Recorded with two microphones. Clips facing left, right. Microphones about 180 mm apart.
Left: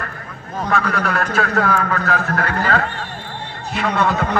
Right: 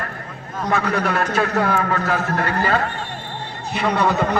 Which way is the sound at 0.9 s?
20° right (ahead or behind).